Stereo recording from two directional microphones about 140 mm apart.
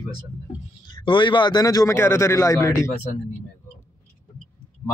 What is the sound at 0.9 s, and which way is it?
A man's voice, 35° left (ahead or behind).